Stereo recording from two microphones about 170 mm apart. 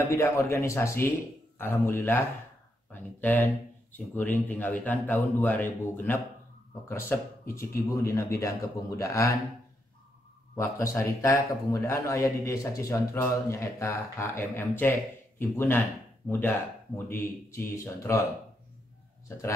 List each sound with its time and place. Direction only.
0.1 s speech: 15° left (ahead or behind)
10.5 s speech: 15° left (ahead or behind)